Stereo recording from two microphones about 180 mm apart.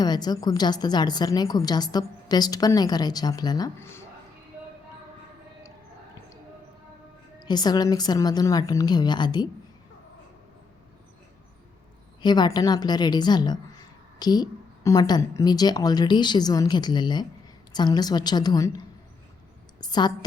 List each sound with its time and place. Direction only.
0.0 s a woman's voice: 20° left (ahead or behind)
7.3 s a woman's voice: 20° left (ahead or behind)
12.2 s a woman's voice: 25° left (ahead or behind)
19.8 s a woman's voice: 25° left (ahead or behind)